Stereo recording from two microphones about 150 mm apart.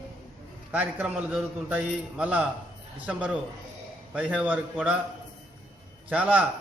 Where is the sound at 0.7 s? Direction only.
10° right (ahead or behind).